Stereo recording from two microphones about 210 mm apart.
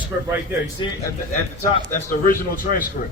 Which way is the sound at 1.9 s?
40° left (ahead or behind).